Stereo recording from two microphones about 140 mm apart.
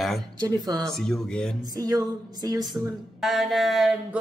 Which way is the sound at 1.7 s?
25° right (ahead or behind).